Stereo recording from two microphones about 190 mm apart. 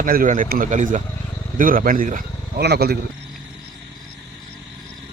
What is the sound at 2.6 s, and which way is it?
Speech, 55° right (ahead or behind).